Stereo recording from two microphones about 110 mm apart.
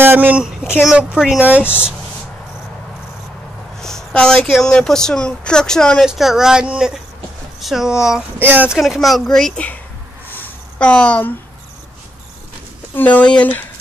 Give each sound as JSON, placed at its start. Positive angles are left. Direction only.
{"t": 0.0, "sound": "speech", "side_deg": -15}
{"t": 1.6, "sound": "speech", "side_deg": 20}
{"t": 3.8, "sound": "a sound", "side_deg": 5}
{"t": 4.6, "sound": "speech", "side_deg": 5}
{"t": 8.4, "sound": "speech", "side_deg": -15}
{"t": 8.7, "sound": "speech", "side_deg": 0}
{"t": 10.3, "sound": "a sound", "side_deg": 15}
{"t": 12.9, "sound": "speech", "side_deg": 15}